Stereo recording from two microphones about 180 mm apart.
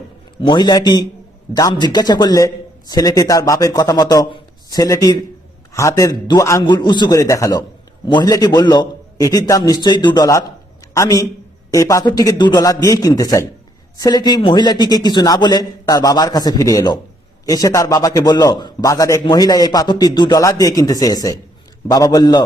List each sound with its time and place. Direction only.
0.4 s a man's voice: 25° left (ahead or behind)